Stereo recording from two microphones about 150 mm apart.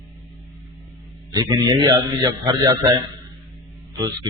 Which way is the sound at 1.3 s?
25° right (ahead or behind).